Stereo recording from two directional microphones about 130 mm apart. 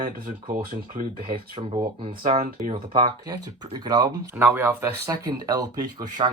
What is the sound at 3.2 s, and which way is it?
Speech, 30° right (ahead or behind).